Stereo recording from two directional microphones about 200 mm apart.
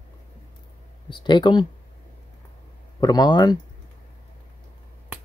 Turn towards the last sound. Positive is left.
turn(degrees=20)  # may be behind; listen again after turning